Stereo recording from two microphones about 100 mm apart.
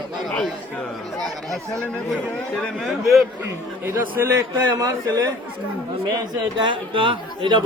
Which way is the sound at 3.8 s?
20° right (ahead or behind).